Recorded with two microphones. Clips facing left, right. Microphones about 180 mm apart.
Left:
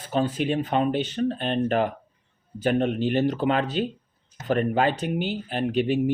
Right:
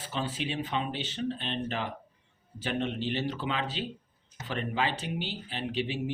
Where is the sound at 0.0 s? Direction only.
50° left (ahead or behind).